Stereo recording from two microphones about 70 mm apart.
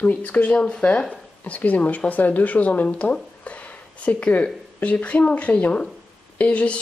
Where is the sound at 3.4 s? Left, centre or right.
Centre.